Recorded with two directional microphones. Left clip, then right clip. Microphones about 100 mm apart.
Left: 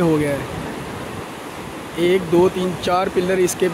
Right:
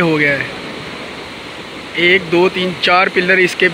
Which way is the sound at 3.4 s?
25° left (ahead or behind).